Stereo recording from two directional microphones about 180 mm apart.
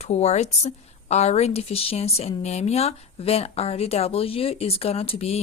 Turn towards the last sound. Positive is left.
turn(degrees=35)  # may be behind; listen again after turning